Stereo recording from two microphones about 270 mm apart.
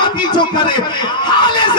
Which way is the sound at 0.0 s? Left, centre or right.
Centre.